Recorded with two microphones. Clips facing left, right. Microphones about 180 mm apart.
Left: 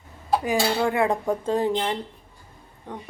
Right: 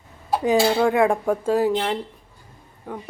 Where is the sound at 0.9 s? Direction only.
15° right (ahead or behind).